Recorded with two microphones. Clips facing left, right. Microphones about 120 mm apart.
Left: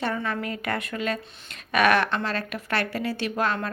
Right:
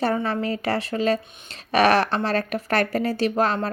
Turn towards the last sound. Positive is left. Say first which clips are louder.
# right 5 dB
turn(degrees=-35)  # may be behind; listen again after turning